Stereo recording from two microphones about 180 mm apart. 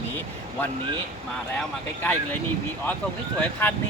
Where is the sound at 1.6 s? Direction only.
10° left (ahead or behind).